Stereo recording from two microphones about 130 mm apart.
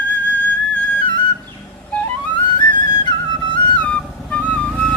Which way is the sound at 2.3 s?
35° left (ahead or behind).